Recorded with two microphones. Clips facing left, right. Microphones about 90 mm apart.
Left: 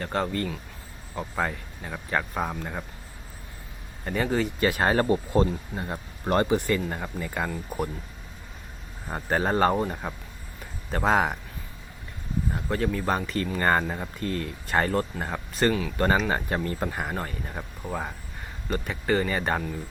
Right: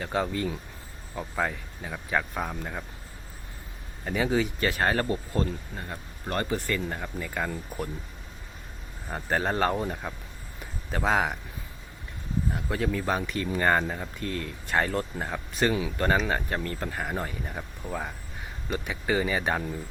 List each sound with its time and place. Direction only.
0.0 s speech: 5° right (ahead or behind)
1.1 s speech: 5° left (ahead or behind)
4.0 s speech: 5° right (ahead or behind)
4.8 s speech: 15° left (ahead or behind)
6.5 s speech: 15° left (ahead or behind)
9.0 s speech: 5° left (ahead or behind)
12.5 s speech: centre (ahead or behind)
17.2 s speech: 5° right (ahead or behind)
17.6 s speech: 10° left (ahead or behind)
18.7 s speech: 5° right (ahead or behind)